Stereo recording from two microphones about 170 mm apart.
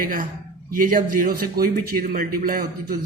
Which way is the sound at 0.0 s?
55° right (ahead or behind).